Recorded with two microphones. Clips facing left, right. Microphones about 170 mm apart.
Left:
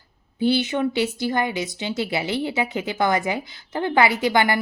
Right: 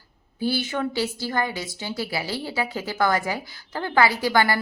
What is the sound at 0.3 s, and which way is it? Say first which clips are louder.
Speech: left 5 dB; 20° left (ahead or behind).